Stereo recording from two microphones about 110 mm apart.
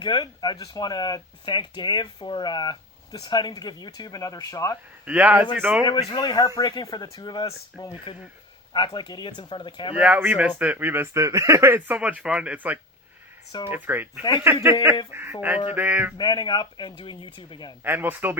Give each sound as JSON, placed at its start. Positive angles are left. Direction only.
{"t": 0.0, "sound": "speech", "side_deg": 40}
{"t": 5.0, "sound": "speech", "side_deg": -15}
{"t": 5.8, "sound": "speech", "side_deg": 40}
{"t": 8.7, "sound": "a man's voice", "side_deg": 45}
{"t": 10.0, "sound": "speech", "side_deg": -15}
{"t": 11.9, "sound": "speech", "side_deg": -10}
{"t": 16.1, "sound": "a man's voice", "side_deg": 40}
{"t": 17.8, "sound": "speech", "side_deg": -20}